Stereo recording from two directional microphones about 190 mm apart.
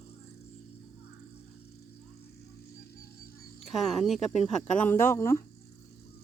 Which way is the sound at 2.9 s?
55° left (ahead or behind).